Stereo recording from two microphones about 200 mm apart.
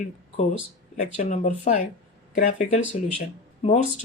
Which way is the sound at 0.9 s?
40° left (ahead or behind).